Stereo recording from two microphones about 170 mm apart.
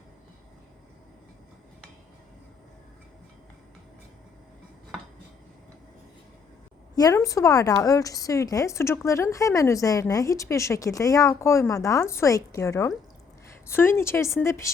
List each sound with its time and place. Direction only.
6.9 s a woman's voice: 20° left (ahead or behind)